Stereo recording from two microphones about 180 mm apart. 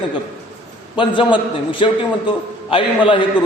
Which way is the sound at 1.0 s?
25° left (ahead or behind).